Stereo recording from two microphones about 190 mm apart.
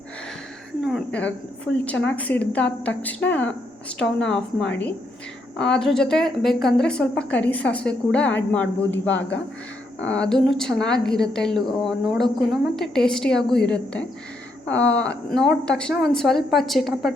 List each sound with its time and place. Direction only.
0.8 s a sound: centre (ahead or behind)
2.0 s a woman's voice: 5° left (ahead or behind)
9.0 s speech: 75° left (ahead or behind)
10.0 s a woman's voice: 5° left (ahead or behind)